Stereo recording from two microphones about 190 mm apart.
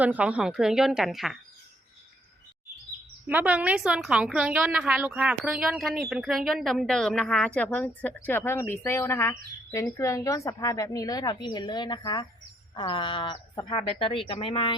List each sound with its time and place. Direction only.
0.0 s a woman's voice: 10° right (ahead or behind)
3.2 s a woman's voice: 10° right (ahead or behind); by 14.8 s 25° left (ahead or behind)